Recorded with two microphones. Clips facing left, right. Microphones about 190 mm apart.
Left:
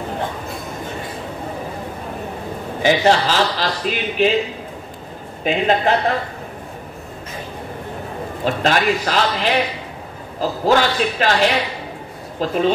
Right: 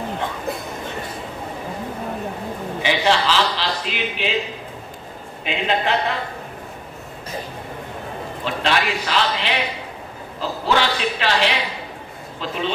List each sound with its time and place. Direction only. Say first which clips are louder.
2.8 s a man's voice: left 5 dB; 45° left (ahead or behind)
5.4 s a man's voice: left 5 dB; 45° left (ahead or behind)
8.5 s a man's voice: left 4 dB; 45° left (ahead or behind)